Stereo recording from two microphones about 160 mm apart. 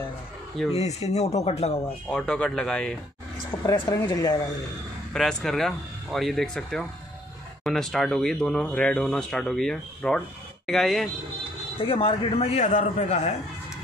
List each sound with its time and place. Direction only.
0.7 s speech: 40° left (ahead or behind)
2.0 s speech: 5° left (ahead or behind)
3.6 s speech: 20° left (ahead or behind)
5.1 s speech: centre (ahead or behind)
11.8 s a man's voice: 35° left (ahead or behind)